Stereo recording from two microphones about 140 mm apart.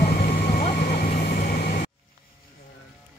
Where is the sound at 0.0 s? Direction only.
90° left.